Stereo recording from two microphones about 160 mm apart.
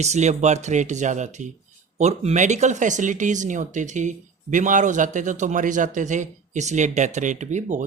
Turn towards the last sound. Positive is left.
turn(degrees=-50)  # may be behind; listen again after turning